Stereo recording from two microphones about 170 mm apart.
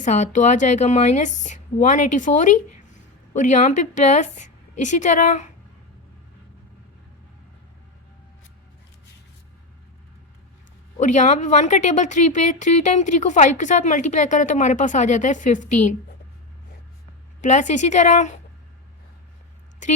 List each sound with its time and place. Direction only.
0.0 s speech: 45° left (ahead or behind)
11.0 s speech: 45° left (ahead or behind)
17.4 s speech: 45° left (ahead or behind)